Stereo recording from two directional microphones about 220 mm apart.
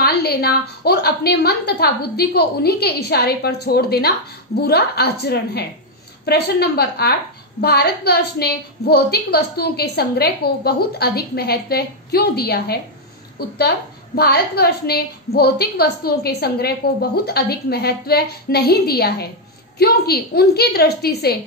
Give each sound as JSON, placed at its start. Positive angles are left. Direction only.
{"t": 0.0, "sound": "a woman's voice", "side_deg": 45}